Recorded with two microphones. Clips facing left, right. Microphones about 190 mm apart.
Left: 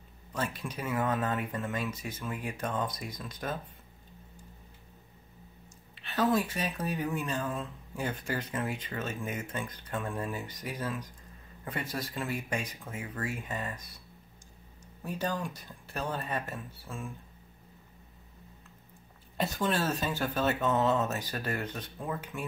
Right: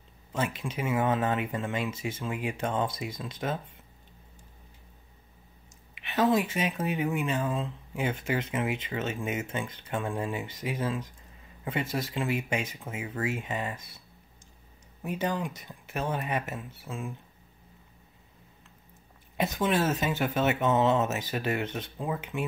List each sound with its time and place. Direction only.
0.3 s speech: 20° right (ahead or behind)
6.0 s speech: 20° right (ahead or behind)
15.0 s speech: 20° right (ahead or behind)
19.3 s speech: 20° right (ahead or behind)